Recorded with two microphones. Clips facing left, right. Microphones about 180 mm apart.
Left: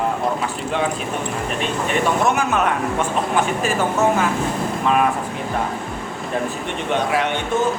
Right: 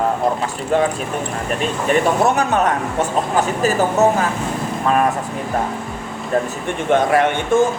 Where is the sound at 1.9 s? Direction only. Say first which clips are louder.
Right 4 dB; 35° right (ahead or behind).